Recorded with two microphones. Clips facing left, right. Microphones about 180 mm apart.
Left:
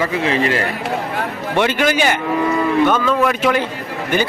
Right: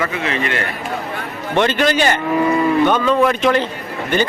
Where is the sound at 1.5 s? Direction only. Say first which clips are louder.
Right 1 dB; 10° left (ahead or behind).